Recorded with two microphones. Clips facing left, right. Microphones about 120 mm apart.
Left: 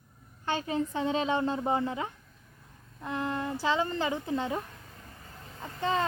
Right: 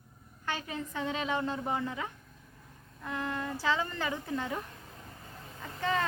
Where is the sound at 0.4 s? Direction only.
30° left (ahead or behind).